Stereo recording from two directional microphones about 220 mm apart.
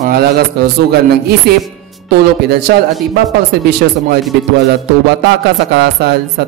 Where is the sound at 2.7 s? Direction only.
45° right (ahead or behind).